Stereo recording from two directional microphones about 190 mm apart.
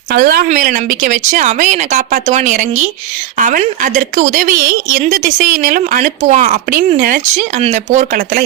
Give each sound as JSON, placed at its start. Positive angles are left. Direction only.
{"t": 0.1, "sound": "a woman's voice", "side_deg": -55}